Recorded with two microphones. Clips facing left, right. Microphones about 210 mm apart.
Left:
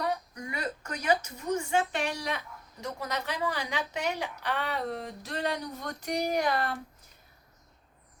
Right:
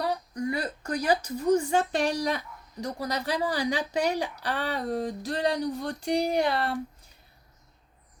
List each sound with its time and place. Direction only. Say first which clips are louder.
0.0 s speech: right 4 dB; 35° right (ahead or behind)